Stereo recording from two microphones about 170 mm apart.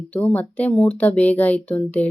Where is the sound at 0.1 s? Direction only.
10° left (ahead or behind).